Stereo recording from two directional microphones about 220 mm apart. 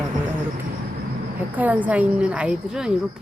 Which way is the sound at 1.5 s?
5° right (ahead or behind).